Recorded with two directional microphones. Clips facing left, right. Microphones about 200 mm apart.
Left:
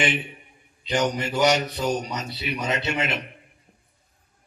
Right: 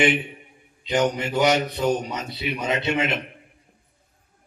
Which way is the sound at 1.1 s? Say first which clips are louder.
Right 1 dB; 20° right (ahead or behind).